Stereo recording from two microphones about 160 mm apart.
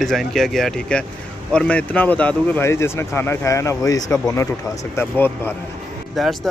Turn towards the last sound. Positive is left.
turn(degrees=0)  # may be behind; listen again after turning